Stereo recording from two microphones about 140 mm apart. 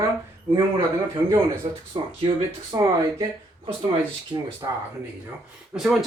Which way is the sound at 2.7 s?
25° right (ahead or behind).